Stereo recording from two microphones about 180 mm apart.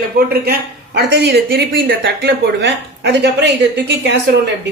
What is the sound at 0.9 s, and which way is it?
A man's voice, 70° right (ahead or behind).